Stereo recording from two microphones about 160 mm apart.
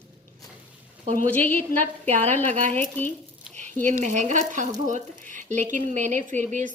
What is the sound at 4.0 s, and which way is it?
Speech, 50° right (ahead or behind).